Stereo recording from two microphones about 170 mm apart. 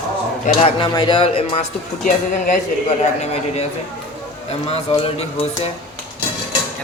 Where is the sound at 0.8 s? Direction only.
25° left (ahead or behind).